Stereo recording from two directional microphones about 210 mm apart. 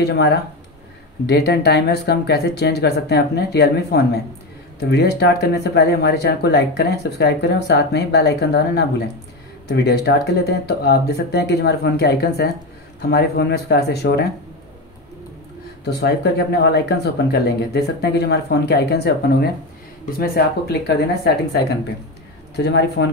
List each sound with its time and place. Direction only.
1.2 s speech: 50° left (ahead or behind)
15.8 s speech: 50° left (ahead or behind)
22.6 s speech: 50° left (ahead or behind)